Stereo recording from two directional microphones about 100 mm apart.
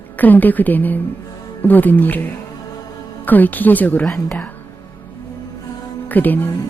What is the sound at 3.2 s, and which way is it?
Speech, 15° left (ahead or behind).